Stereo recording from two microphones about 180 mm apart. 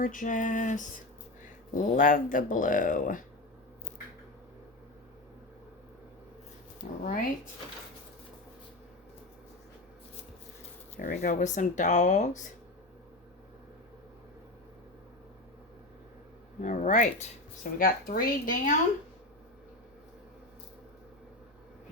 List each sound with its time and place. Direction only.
0.0 s speech: 50° left (ahead or behind)
7.0 s speech: 50° left (ahead or behind)
10.9 s speech: 45° left (ahead or behind)
16.6 s speech: 45° left (ahead or behind)